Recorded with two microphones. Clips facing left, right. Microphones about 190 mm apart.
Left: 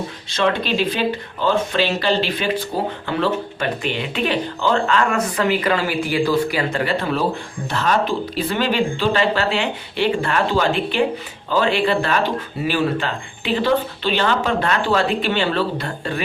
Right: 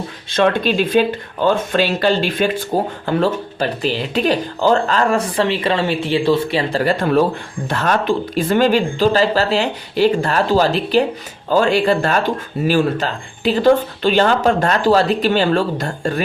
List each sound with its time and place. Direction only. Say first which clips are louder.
0.3 s speech: right 4 dB; 55° right (ahead or behind); by 6.8 s 25° right (ahead or behind)
6.8 s speech: right 5 dB; 50° right (ahead or behind)